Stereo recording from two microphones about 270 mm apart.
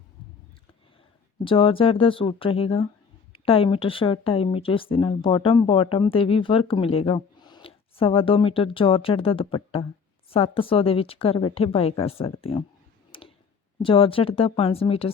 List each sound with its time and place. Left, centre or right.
1.5 s speech: centre
13.1 s tick-tock: centre
13.8 s speech: centre